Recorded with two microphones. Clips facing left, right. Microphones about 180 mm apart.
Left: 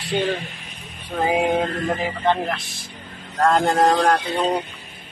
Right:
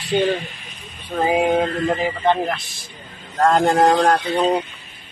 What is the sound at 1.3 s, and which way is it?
Speech, centre (ahead or behind).